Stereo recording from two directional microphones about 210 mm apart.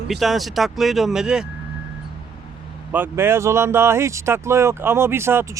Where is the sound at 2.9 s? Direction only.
10° right (ahead or behind).